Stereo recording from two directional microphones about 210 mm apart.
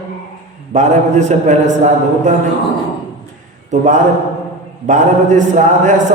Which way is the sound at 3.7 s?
35° right (ahead or behind).